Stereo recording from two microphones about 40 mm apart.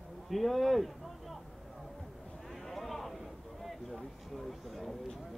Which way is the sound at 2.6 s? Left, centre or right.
Centre.